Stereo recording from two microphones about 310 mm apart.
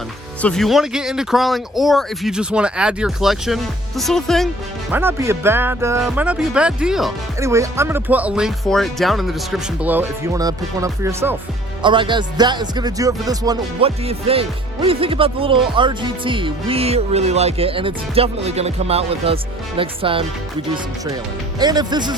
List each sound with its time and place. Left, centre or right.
0.4 s speech: centre
21.6 s speech: centre